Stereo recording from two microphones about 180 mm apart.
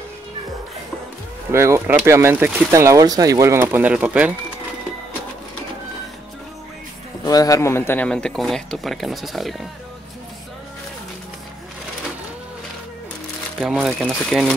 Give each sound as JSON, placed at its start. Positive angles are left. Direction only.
{"t": 1.5, "sound": "speech", "side_deg": -15}
{"t": 7.2, "sound": "a man's voice", "side_deg": 20}
{"t": 13.6, "sound": "a man's voice", "side_deg": 0}